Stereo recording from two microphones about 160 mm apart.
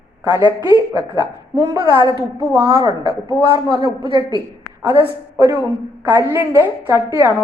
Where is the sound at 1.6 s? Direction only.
20° right (ahead or behind).